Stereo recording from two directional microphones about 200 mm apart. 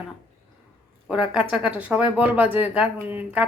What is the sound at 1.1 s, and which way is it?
Speech, 5° right (ahead or behind).